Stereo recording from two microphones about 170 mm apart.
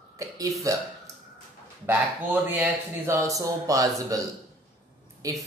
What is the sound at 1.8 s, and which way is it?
Speech, 10° right (ahead or behind).